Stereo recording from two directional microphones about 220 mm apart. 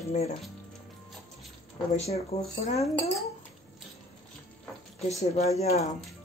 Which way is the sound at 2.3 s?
25° left (ahead or behind).